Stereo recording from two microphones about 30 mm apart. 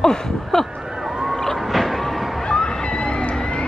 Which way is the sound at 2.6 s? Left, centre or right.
Left.